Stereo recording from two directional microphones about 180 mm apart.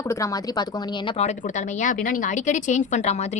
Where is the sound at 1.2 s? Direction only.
40° left (ahead or behind).